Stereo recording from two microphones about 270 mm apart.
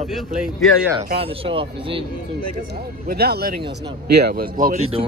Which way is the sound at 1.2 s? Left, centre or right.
Centre.